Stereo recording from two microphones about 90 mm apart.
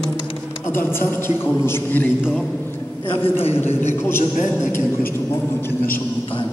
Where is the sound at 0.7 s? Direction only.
25° left (ahead or behind).